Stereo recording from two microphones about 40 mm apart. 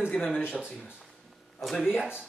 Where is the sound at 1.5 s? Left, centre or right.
Centre.